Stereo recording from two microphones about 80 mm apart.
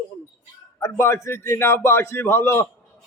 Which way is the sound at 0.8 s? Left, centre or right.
Left.